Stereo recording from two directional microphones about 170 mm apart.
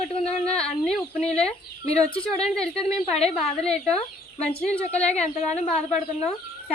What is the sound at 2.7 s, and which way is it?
Speech, 35° left (ahead or behind).